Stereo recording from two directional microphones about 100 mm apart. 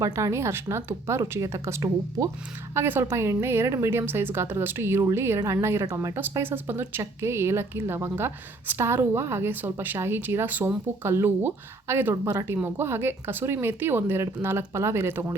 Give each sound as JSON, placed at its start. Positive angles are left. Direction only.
{"t": 0.0, "sound": "speech", "side_deg": -30}
{"t": 2.7, "sound": "speech", "side_deg": -25}
{"t": 5.8, "sound": "speech", "side_deg": -35}
{"t": 6.4, "sound": "speech", "side_deg": -25}